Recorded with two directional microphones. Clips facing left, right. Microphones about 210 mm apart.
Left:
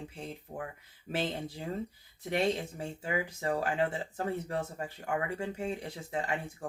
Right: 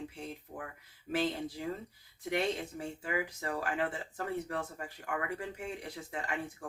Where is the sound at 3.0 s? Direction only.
30° left (ahead or behind).